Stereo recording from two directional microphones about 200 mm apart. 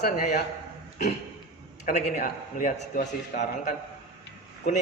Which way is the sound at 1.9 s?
45° left (ahead or behind).